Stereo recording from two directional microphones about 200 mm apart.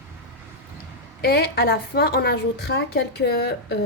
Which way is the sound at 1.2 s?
55° left (ahead or behind).